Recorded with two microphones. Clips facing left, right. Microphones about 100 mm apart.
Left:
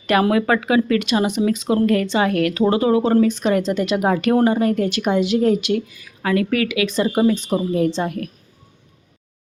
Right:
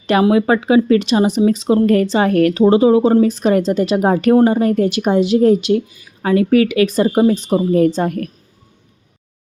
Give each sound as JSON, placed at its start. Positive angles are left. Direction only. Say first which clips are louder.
{"t": 0.1, "sound": "a woman's voice", "louder": "right 4 dB", "side_deg": -20}
{"t": 3.2, "sound": "a woman's voice", "louder": "right 4 dB", "side_deg": -40}